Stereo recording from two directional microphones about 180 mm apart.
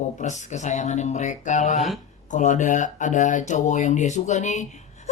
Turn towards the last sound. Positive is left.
turn(degrees=40)  # may be behind; listen again after turning